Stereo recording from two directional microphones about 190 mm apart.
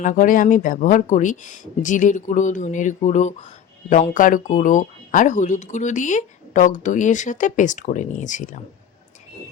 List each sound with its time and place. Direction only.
0.0 s speech: 45° left (ahead or behind)